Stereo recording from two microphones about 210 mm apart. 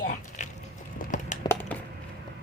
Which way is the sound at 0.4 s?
35° left (ahead or behind).